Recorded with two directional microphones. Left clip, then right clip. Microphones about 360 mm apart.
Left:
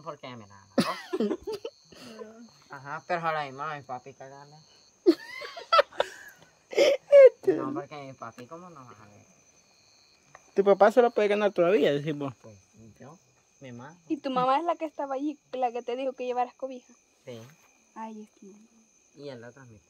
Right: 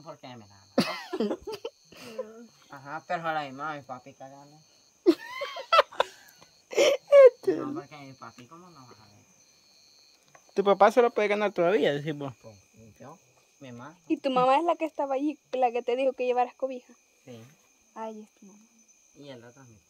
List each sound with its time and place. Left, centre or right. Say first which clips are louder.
0.0 s speech: left 4 dB; centre
1.5 s a sound: left 1 dB; centre
2.7 s speech: left 1 dB; centre
5.0 s a sound: even; centre
6.7 s wail: left 1 dB; centre
7.6 s speech: left 3 dB; centre
10.5 s speech: left 1 dB; centre
14.0 s speech: right 3 dB; right
19.2 s speech: left 4 dB; centre